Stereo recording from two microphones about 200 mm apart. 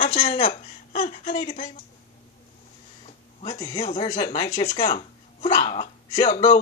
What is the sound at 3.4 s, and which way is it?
Speech, 25° left (ahead or behind).